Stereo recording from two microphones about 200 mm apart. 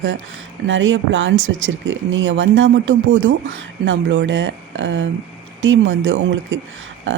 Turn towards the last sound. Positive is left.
turn(degrees=-70)  # may be behind; listen again after turning